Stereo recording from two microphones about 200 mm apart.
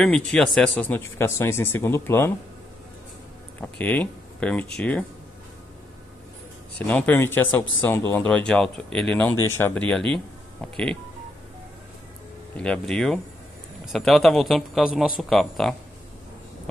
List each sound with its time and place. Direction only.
0.0 s speech: 5° left (ahead or behind)
3.6 s speech: 5° left (ahead or behind)
6.9 s speech: 10° left (ahead or behind)
12.5 s speech: 5° left (ahead or behind)